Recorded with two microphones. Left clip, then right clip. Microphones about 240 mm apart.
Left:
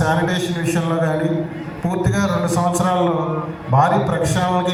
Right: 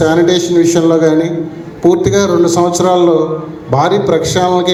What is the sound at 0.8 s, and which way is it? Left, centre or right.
A man's voice, right.